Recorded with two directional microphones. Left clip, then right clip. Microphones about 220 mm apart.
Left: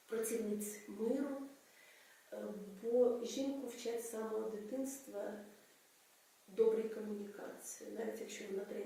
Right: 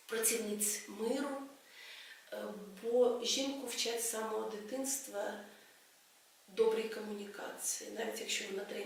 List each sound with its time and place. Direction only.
0.1 s speech: 5° left (ahead or behind)
3.2 s speech: 5° left (ahead or behind)
6.6 s speech: 10° left (ahead or behind)